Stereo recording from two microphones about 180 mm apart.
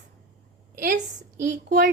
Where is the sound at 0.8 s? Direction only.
50° right (ahead or behind).